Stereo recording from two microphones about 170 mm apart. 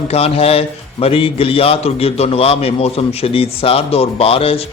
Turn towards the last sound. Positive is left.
turn(degrees=35)  # may be behind; listen again after turning